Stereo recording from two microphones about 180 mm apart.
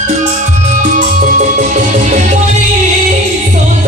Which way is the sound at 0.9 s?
45° right (ahead or behind).